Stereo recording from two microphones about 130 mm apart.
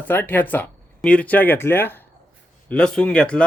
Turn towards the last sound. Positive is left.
turn(degrees=10)  # may be behind; listen again after turning